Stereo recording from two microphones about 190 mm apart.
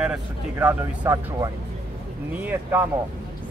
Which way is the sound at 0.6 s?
15° right (ahead or behind).